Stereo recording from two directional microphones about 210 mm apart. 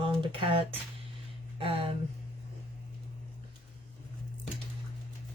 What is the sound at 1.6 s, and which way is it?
Speech, 25° right (ahead or behind).